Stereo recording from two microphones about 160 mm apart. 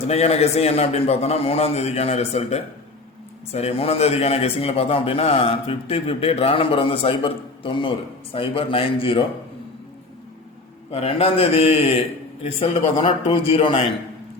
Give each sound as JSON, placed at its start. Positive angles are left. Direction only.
{"t": 0.1, "sound": "a man's voice", "side_deg": 40}
{"t": 10.9, "sound": "a man's voice", "side_deg": 40}